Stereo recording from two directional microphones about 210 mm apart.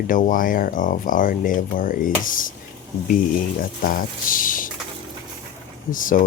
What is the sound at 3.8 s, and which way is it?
Speech, 40° left (ahead or behind).